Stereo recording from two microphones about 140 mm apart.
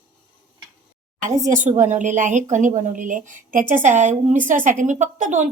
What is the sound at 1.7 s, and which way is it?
A woman's voice, 60° right (ahead or behind).